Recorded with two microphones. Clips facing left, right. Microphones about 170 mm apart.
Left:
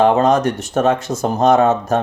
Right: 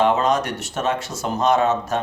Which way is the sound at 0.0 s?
45° left (ahead or behind).